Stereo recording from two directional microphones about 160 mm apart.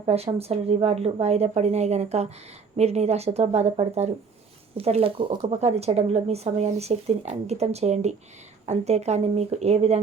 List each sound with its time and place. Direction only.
0.0 s speech: 40° right (ahead or behind)